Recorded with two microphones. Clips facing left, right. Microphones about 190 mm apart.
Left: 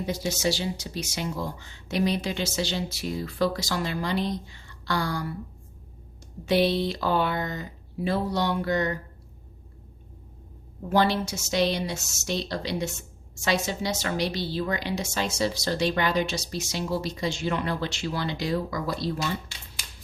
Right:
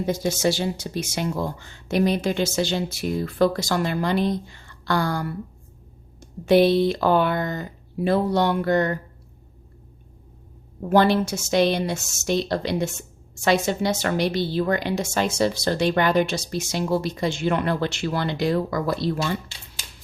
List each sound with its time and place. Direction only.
0.0 s a woman's voice: 50° right (ahead or behind)
10.8 s a woman's voice: 55° right (ahead or behind)